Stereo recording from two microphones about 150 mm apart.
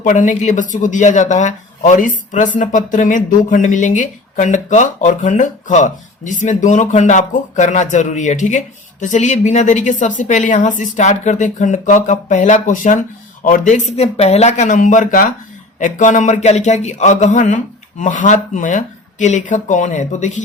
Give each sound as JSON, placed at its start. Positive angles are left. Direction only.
{"t": 0.0, "sound": "speech", "side_deg": 60}